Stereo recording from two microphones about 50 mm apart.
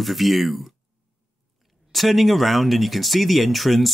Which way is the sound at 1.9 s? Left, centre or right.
Centre.